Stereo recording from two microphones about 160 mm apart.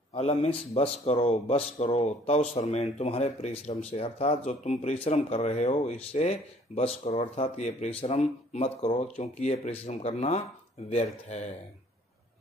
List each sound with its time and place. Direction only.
0.1 s a man's voice: 45° left (ahead or behind)